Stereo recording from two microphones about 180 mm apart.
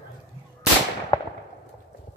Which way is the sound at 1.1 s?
20° left (ahead or behind).